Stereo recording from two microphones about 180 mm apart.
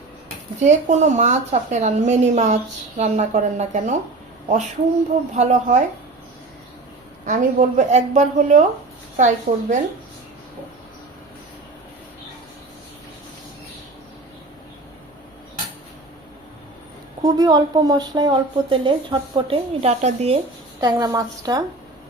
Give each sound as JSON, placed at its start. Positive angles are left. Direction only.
{"t": 0.6, "sound": "a woman's voice", "side_deg": -40}
{"t": 5.3, "sound": "a woman's voice", "side_deg": -40}
{"t": 7.3, "sound": "a woman's voice", "side_deg": -45}
{"t": 17.2, "sound": "speech", "side_deg": -20}
{"t": 20.8, "sound": "speech", "side_deg": -20}